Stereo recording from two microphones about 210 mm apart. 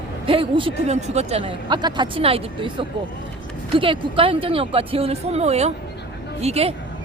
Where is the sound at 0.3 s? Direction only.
25° right (ahead or behind).